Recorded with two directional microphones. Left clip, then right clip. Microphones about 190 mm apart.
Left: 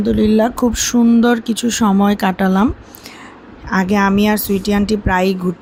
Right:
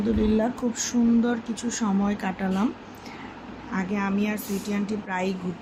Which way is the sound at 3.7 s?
60° left (ahead or behind).